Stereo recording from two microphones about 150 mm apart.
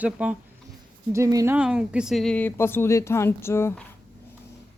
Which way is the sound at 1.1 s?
20° right (ahead or behind).